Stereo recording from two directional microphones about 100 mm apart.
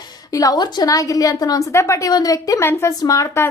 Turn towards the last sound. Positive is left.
turn(degrees=35)  # may be behind; listen again after turning